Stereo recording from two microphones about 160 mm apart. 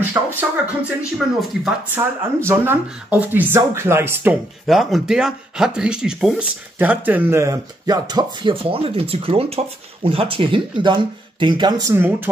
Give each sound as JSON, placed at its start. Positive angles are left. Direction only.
{"t": 0.1, "sound": "speech", "side_deg": -10}
{"t": 2.0, "sound": "speech", "side_deg": -15}
{"t": 4.6, "sound": "speech", "side_deg": 0}
{"t": 11.9, "sound": "speech", "side_deg": -15}